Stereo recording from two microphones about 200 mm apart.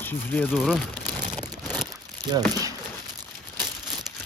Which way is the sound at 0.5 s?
Centre (ahead or behind).